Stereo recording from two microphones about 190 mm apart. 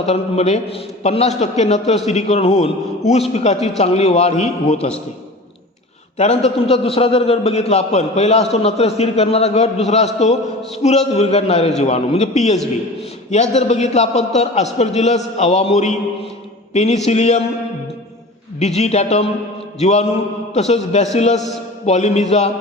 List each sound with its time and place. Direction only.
0.0 s a man's voice: 35° left (ahead or behind)
6.1 s a man's voice: 35° left (ahead or behind)
18.6 s a man's voice: 35° left (ahead or behind)